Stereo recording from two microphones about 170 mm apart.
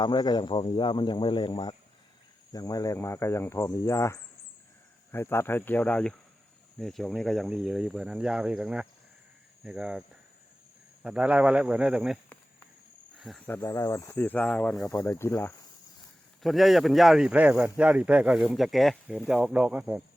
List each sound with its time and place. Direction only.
0.0 s speech: 25° left (ahead or behind); by 10.0 s 5° right (ahead or behind)
11.0 s speech: 5° right (ahead or behind)
13.1 s cricket: centre (ahead or behind)
13.6 s speech: 20° left (ahead or behind)
16.4 s speech: centre (ahead or behind)